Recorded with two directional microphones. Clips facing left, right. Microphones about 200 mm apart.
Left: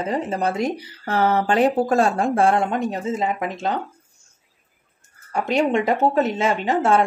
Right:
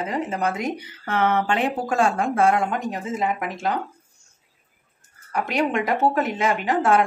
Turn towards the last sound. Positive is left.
turn(degrees=25)  # may be behind; listen again after turning